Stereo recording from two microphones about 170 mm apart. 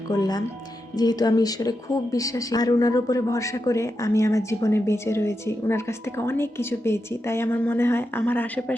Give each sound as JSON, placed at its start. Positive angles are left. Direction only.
{"t": 0.1, "sound": "speech", "side_deg": 25}